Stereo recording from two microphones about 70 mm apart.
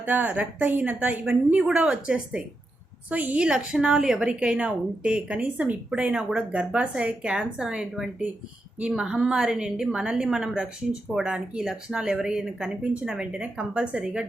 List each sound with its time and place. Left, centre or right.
0.0 s a woman's voice: right
3.4 s a woman's voice: centre